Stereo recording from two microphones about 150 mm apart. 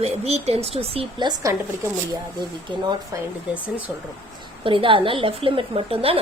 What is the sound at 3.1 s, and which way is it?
Speech, 20° right (ahead or behind).